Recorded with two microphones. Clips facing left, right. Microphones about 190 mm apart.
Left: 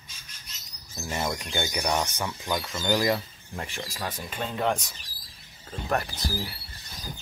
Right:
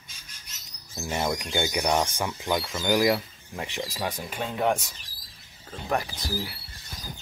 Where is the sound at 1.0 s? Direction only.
15° right (ahead or behind).